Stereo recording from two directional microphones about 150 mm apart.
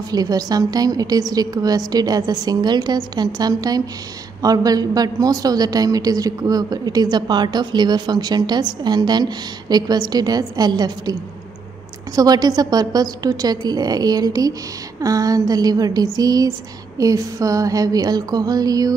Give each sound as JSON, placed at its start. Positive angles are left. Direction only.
{"t": 0.1, "sound": "a woman's voice", "side_deg": -25}
{"t": 12.2, "sound": "a woman's voice", "side_deg": -25}